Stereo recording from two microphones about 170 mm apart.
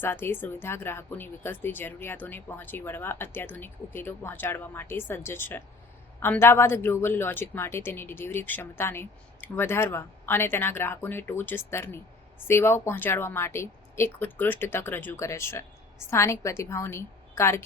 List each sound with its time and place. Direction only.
0.0 s a woman's voice: 15° left (ahead or behind)